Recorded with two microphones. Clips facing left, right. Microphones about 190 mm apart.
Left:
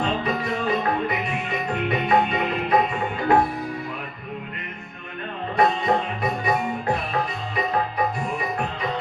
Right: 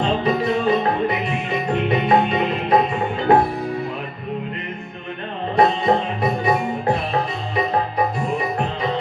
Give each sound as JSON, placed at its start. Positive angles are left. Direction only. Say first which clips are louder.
{"t": 0.0, "sound": "music", "louder": "right 5 dB", "side_deg": -25}
{"t": 5.5, "sound": "music", "louder": "right 4 dB", "side_deg": -30}